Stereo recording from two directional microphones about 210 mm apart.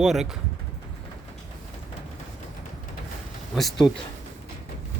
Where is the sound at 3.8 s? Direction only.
15° left (ahead or behind).